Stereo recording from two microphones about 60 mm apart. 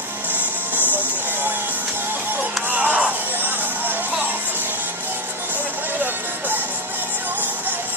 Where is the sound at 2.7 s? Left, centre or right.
Right.